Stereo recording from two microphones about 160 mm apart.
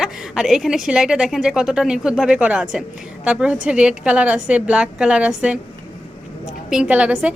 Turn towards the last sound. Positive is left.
turn(degrees=-10)  # may be behind; listen again after turning